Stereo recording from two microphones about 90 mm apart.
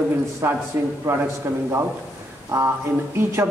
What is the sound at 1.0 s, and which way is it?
Speech, 35° right (ahead or behind).